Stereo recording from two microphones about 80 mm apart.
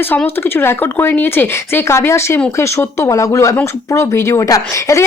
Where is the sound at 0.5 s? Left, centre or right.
Left.